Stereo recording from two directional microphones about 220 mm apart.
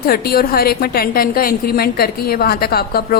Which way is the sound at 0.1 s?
45° left (ahead or behind).